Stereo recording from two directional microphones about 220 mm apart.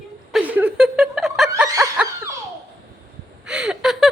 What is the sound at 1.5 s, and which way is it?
Snicker, 15° right (ahead or behind).